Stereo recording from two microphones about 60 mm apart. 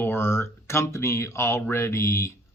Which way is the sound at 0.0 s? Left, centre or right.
Left.